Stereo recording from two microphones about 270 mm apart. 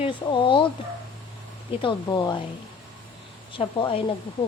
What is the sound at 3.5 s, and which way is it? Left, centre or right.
Speech, centre.